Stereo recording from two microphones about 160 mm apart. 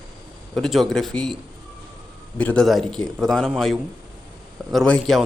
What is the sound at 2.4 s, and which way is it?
Speech, 5° left (ahead or behind).